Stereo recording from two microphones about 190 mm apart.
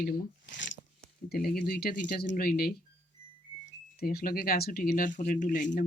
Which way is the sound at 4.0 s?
55° left (ahead or behind).